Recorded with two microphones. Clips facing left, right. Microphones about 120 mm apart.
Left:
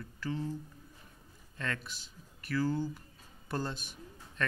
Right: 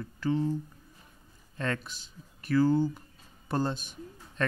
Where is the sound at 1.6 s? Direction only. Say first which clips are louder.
Right 6 dB; 30° right (ahead or behind).